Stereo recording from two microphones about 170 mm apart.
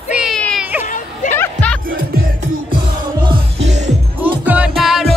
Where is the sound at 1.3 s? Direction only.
10° left (ahead or behind).